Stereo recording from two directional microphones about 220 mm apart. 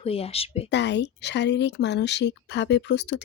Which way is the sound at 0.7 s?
50° left (ahead or behind).